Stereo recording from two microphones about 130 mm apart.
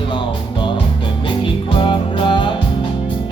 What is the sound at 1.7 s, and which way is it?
Music, 40° left (ahead or behind).